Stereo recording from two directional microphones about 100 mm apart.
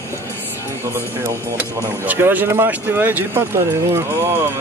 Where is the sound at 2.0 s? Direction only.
15° right (ahead or behind).